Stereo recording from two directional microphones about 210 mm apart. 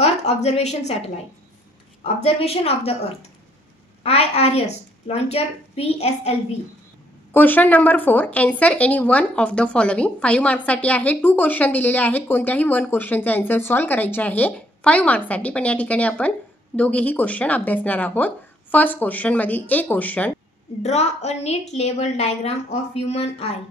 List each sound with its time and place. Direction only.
0.0 s a woman's voice: 30° left (ahead or behind)
2.2 s a woman's voice: 30° left (ahead or behind)
4.0 s a woman's voice: 30° left (ahead or behind)
7.3 s speech: 10° left (ahead or behind)
20.8 s a woman's voice: 30° left (ahead or behind)